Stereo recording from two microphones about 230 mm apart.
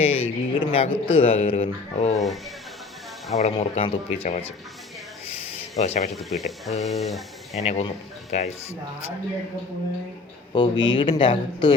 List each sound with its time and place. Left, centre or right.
0.0 s speech: left
3.3 s speech: left
5.8 s speech: left
6.1 s speech: centre
7.6 s speech: left
10.5 s speech: centre